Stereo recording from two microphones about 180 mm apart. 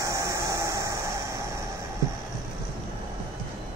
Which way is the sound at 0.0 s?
15° right (ahead or behind).